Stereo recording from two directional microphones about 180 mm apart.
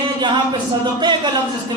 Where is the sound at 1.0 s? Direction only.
25° right (ahead or behind).